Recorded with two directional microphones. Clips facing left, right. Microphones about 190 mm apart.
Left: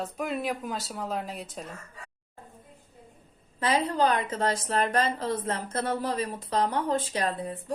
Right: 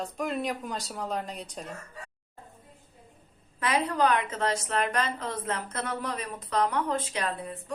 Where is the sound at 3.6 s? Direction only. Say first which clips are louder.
Left 1 dB; 30° left (ahead or behind).